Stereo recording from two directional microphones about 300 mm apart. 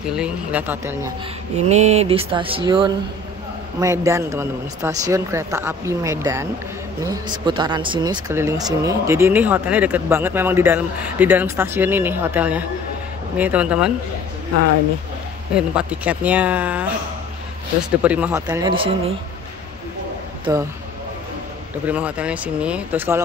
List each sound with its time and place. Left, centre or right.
0.2 s speech: centre
1.7 s speech: right; by 13.9 s centre
15.5 s speech: centre
18.0 s speech: centre
20.5 s speech: centre
21.8 s speech: centre